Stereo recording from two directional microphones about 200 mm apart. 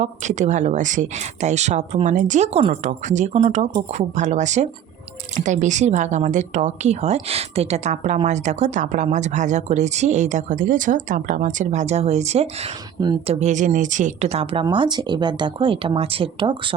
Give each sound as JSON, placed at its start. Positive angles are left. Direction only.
{"t": 0.0, "sound": "a woman's voice", "side_deg": -35}